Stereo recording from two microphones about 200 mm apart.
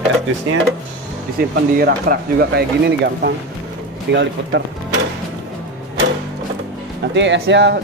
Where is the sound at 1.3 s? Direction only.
50° right (ahead or behind).